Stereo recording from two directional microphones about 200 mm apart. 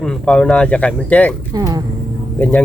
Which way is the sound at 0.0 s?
5° left (ahead or behind).